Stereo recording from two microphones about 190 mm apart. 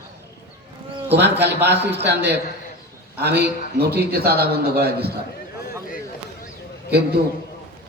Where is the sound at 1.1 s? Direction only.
65° right (ahead or behind).